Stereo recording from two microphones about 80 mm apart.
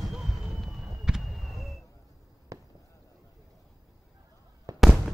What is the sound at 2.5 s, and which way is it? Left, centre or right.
Fireworks, right.